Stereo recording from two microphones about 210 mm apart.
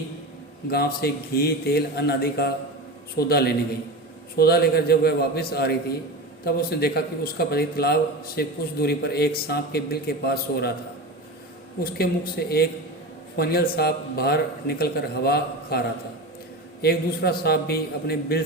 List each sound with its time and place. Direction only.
0.7 s speech: 50° left (ahead or behind)
11.8 s speech: 45° left (ahead or behind)
16.8 s speech: 50° left (ahead or behind)